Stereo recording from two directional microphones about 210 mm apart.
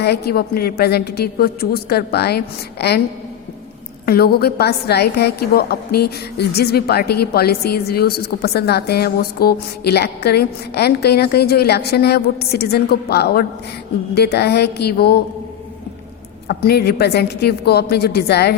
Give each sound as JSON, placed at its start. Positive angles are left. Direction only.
{"t": 0.0, "sound": "a woman's voice", "side_deg": 50}
{"t": 4.0, "sound": "a woman's voice", "side_deg": 45}
{"t": 16.5, "sound": "a woman's voice", "side_deg": 50}